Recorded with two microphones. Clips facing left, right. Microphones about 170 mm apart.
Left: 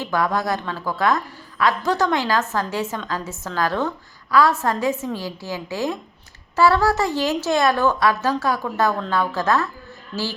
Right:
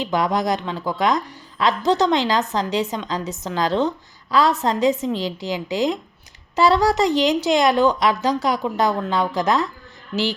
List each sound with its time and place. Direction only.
0.0 s a woman's voice: 20° right (ahead or behind)